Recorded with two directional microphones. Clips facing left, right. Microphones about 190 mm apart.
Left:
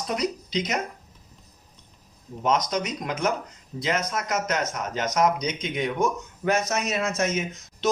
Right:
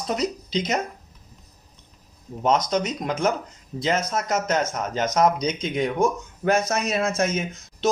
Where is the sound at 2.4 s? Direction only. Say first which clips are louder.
Right 3 dB; 30° right (ahead or behind).